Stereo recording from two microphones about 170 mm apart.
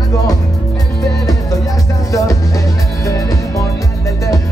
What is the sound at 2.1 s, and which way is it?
Music, 20° left (ahead or behind).